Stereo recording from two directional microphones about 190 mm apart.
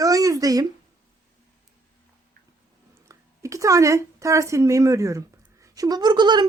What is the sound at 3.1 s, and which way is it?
A woman's voice, 15° right (ahead or behind).